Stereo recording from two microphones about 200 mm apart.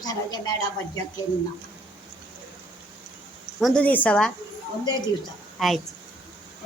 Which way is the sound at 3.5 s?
Centre (ahead or behind).